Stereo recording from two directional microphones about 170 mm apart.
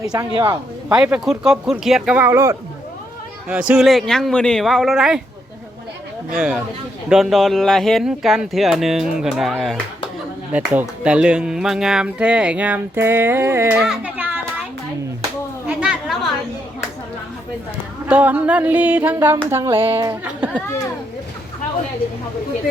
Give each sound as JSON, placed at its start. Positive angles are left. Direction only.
{"t": 0.1, "sound": "speech", "side_deg": -20}
{"t": 0.9, "sound": "speech", "side_deg": -5}
{"t": 3.5, "sound": "speech", "side_deg": -5}
{"t": 6.3, "sound": "speech", "side_deg": -5}
{"t": 13.7, "sound": "a child's voice", "side_deg": -5}
{"t": 15.6, "sound": "chatter", "side_deg": -5}
{"t": 18.1, "sound": "speech", "side_deg": -10}
{"t": 19.8, "sound": "speech", "side_deg": -30}
{"t": 20.1, "sound": "speech", "side_deg": -10}